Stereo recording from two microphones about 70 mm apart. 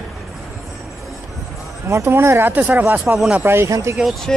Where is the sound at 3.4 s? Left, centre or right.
Right.